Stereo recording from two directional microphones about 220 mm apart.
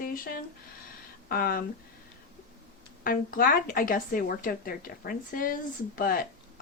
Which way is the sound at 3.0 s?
40° left (ahead or behind).